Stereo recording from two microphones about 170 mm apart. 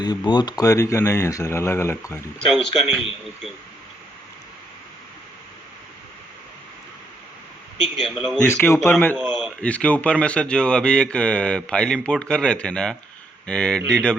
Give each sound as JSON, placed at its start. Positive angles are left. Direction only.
{"t": 0.3, "sound": "speech", "side_deg": 25}
{"t": 2.5, "sound": "speech", "side_deg": 0}
{"t": 7.9, "sound": "speech", "side_deg": 0}
{"t": 8.4, "sound": "speech", "side_deg": 10}